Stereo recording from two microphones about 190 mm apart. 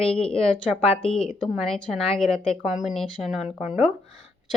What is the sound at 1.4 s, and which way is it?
A woman's voice, centre (ahead or behind).